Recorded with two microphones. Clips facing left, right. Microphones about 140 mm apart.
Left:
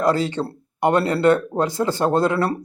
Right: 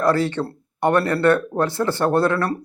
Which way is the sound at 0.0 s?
20° left (ahead or behind).